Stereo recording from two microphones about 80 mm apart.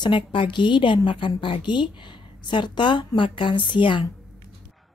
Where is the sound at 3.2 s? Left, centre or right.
Left.